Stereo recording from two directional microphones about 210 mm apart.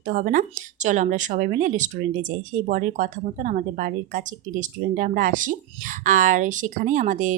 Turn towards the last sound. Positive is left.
turn(degrees=-35)  # may be behind; listen again after turning